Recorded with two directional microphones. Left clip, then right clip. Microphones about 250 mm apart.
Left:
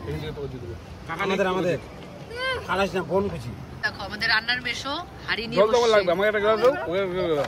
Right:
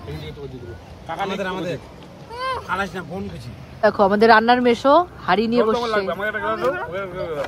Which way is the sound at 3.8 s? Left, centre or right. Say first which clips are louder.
Right 12 dB; centre.